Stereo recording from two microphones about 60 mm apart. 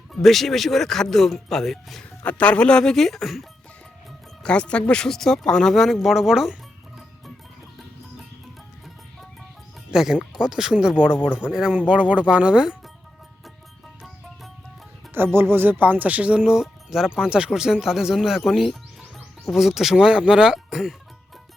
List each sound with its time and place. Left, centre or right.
0.1 s speech: centre
2.2 s speech: left; by 3.4 s centre
4.4 s speech: centre
9.9 s speech: centre
15.1 s speech: right; by 16.6 s centre
16.6 s speech: centre